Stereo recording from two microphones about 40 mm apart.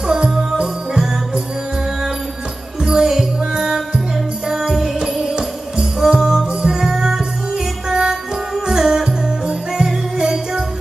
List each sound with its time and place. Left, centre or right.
0.6 s jingle bell: centre
2.8 s music: centre
5.3 s music: centre
10.1 s jingle bell: centre